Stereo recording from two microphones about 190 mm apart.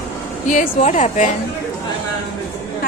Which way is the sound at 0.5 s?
40° left (ahead or behind).